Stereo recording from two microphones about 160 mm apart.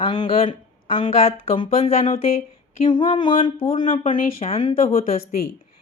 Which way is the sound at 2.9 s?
30° left (ahead or behind).